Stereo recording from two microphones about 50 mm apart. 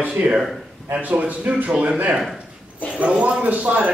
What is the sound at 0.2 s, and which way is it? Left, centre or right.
Speech, right.